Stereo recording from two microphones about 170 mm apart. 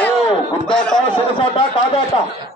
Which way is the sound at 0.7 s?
5° left (ahead or behind).